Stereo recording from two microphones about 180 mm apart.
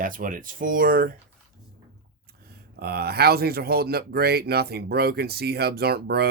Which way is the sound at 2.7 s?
60° right (ahead or behind).